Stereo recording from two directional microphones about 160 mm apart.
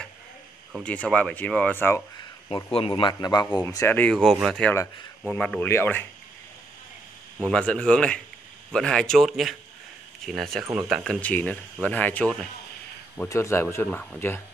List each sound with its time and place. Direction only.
0.8 s speech: 10° left (ahead or behind)
2.5 s a man's voice: 35° left (ahead or behind); by 6.0 s 10° left (ahead or behind)
7.3 s speech: 5° left (ahead or behind)
13.3 s speech: 15° left (ahead or behind)